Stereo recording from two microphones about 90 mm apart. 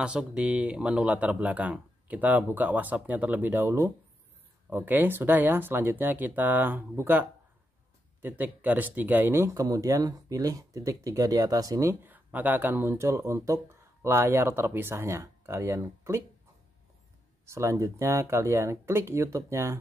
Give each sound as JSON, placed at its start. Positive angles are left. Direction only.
{"t": 0.0, "sound": "speech", "side_deg": -10}
{"t": 12.1, "sound": "speech", "side_deg": -20}
{"t": 17.5, "sound": "speech", "side_deg": -30}